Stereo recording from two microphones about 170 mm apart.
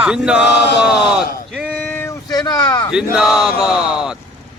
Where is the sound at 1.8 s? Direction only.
15° left (ahead or behind).